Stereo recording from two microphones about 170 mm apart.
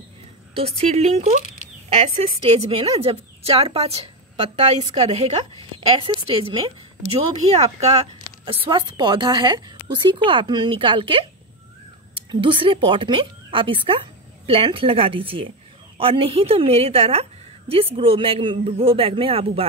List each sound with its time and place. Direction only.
0.6 s a woman's voice: 40° right (ahead or behind)
2.4 s a woman's voice: 40° right (ahead or behind)
8.5 s a woman's voice: 30° right (ahead or behind)